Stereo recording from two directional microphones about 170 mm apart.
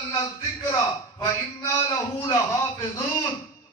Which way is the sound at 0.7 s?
20° left (ahead or behind).